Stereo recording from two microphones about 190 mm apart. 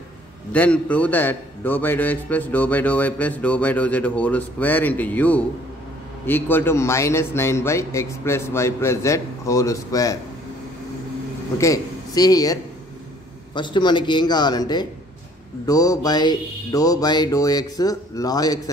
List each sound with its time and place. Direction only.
0.5 s a man's voice: 5° left (ahead or behind)
11.5 s a man's voice: 15° left (ahead or behind)
13.6 s a sound: 25° left (ahead or behind)